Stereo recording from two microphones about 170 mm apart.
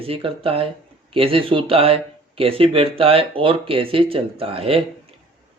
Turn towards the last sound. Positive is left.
turn(degrees=-35)  # may be behind; listen again after turning